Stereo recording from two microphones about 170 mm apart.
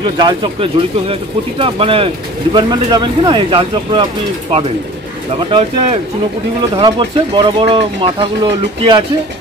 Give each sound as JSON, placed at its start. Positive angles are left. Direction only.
{"t": 0.0, "sound": "speech", "side_deg": -25}
{"t": 5.5, "sound": "speech", "side_deg": -35}